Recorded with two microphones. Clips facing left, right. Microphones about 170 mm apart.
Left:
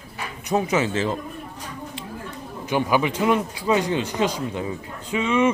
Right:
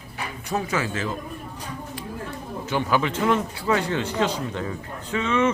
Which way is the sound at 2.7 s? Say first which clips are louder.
Left 2 dB; 15° left (ahead or behind).